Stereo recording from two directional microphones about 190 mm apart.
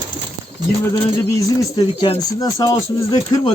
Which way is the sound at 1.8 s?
25° left (ahead or behind).